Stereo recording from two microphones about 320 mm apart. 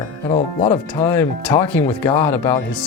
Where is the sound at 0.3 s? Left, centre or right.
Centre.